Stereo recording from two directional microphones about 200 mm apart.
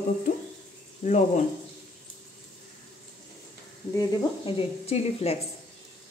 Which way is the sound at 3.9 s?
25° left (ahead or behind).